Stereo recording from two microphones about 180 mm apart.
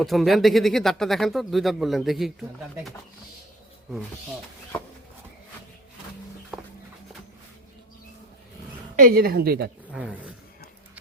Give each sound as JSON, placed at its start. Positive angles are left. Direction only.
{"t": 0.0, "sound": "speech", "side_deg": 0}
{"t": 9.0, "sound": "a woman's voice", "side_deg": -50}
{"t": 9.9, "sound": "speech", "side_deg": -5}